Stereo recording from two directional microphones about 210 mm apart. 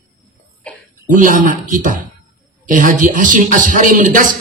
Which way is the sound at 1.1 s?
40° right (ahead or behind).